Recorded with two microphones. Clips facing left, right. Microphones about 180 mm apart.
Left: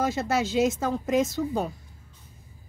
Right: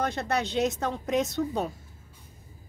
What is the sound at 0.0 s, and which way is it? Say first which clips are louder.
Speech: left 3 dB; 5° left (ahead or behind).